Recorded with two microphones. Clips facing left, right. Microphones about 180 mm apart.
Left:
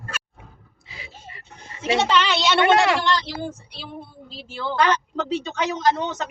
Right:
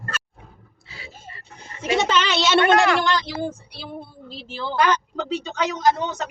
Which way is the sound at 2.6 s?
25° left (ahead or behind).